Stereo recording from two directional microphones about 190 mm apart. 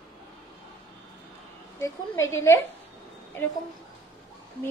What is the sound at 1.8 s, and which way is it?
Speech, 15° left (ahead or behind).